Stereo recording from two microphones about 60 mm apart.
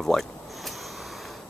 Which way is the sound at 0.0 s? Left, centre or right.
Centre.